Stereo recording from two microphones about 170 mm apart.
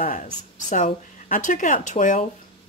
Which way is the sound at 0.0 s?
50° left (ahead or behind).